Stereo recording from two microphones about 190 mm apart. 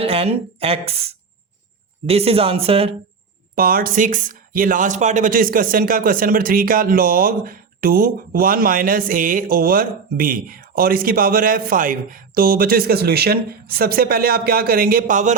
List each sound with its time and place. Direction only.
0.0 s speech: 30° right (ahead or behind)
3.5 s speech: 50° right (ahead or behind)